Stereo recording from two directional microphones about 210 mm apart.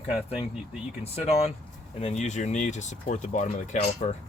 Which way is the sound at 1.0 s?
30° left (ahead or behind).